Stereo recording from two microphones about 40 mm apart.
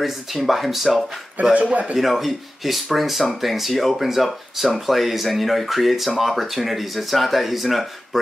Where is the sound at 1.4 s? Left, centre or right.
Right.